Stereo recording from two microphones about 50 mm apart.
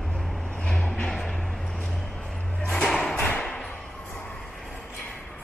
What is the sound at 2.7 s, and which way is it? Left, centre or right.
Music, centre.